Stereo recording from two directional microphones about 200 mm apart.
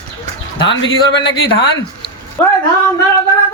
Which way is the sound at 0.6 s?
65° left (ahead or behind).